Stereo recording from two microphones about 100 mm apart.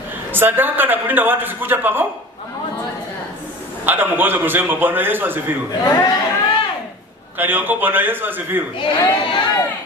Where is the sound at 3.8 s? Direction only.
20° right (ahead or behind).